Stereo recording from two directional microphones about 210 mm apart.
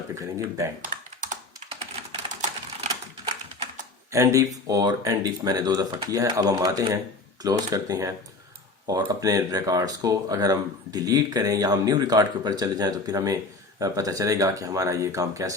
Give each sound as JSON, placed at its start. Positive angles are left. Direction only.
{"t": 0.1, "sound": "speech", "side_deg": -15}
{"t": 0.8, "sound": "computer keyboard", "side_deg": -35}
{"t": 2.3, "sound": "typing", "side_deg": -35}
{"t": 2.9, "sound": "typewriter", "side_deg": -20}
{"t": 4.1, "sound": "speech", "side_deg": -15}